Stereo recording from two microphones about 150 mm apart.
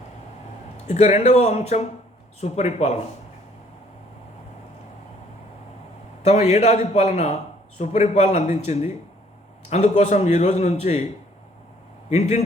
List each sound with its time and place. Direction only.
0.9 s a man's voice: 50° left (ahead or behind)
6.2 s a man's voice: 50° left (ahead or behind)